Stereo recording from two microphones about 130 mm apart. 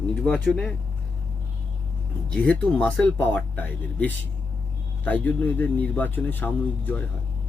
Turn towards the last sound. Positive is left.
turn(degrees=15)  # may be behind; listen again after turning